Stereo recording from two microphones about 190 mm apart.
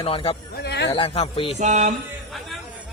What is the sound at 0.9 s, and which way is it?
Speech, 30° left (ahead or behind).